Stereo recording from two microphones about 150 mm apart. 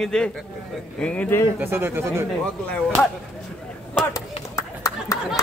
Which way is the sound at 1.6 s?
15° right (ahead or behind).